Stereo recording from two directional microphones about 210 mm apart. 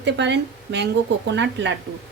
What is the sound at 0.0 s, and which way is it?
A woman's voice, 55° right (ahead or behind).